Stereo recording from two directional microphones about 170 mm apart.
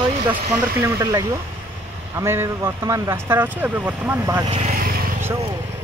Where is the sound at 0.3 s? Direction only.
15° right (ahead or behind).